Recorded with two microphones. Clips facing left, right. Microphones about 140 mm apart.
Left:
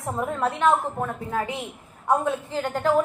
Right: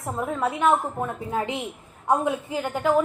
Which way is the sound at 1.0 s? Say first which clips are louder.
Even; 20° right (ahead or behind).